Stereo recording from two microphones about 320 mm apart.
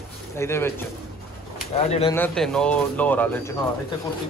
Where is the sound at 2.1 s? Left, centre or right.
Centre.